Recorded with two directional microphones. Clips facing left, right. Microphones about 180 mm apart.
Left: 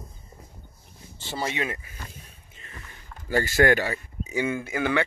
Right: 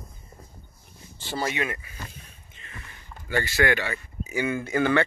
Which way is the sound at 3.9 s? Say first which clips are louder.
Left 1 dB; 25° left (ahead or behind).